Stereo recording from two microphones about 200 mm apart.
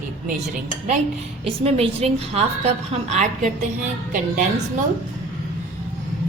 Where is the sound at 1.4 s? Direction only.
30° right (ahead or behind).